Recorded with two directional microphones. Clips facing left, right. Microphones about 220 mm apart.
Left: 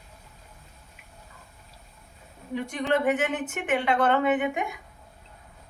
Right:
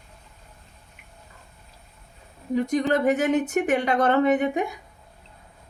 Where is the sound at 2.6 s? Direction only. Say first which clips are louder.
Right 9 dB; 40° right (ahead or behind).